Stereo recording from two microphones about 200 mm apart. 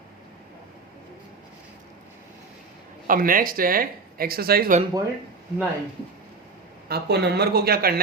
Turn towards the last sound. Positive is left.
turn(degrees=-50)  # may be behind; listen again after turning